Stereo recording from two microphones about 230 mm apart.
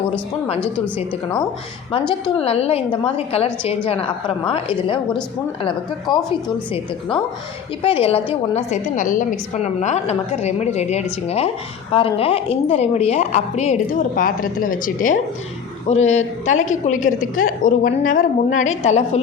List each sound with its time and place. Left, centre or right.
2.4 s a woman's voice: left
7.8 s a woman's voice: left